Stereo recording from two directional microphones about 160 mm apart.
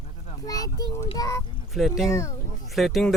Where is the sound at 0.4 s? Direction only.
25° left (ahead or behind).